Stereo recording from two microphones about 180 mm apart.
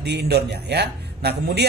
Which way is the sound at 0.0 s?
65° right (ahead or behind).